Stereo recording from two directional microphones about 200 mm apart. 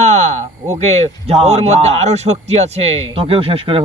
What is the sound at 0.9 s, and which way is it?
Speech, 30° right (ahead or behind).